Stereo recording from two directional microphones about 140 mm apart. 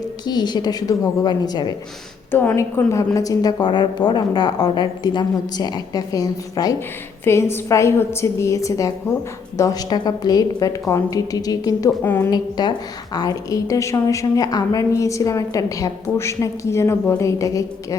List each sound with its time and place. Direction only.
0.3 s a woman's voice: 30° left (ahead or behind)
2.3 s a woman's voice: 15° left (ahead or behind)
12.0 s a woman's voice: 15° left (ahead or behind)
12.3 s a woman's voice: 30° left (ahead or behind)